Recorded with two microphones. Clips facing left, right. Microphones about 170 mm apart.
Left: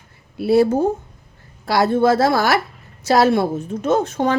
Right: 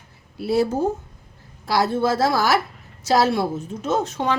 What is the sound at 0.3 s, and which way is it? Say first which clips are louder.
A woman's voice: left 5 dB; 60° left (ahead or behind).